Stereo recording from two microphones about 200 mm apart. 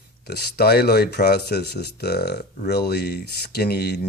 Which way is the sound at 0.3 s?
50° left (ahead or behind).